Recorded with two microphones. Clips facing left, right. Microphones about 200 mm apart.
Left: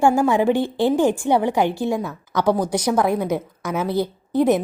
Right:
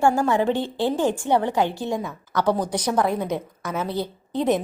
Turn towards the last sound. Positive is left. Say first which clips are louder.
# left 4 dB
turn(degrees=10)  # may be behind; listen again after turning